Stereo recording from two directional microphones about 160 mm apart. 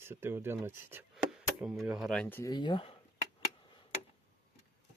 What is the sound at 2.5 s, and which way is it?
Speech, 30° left (ahead or behind).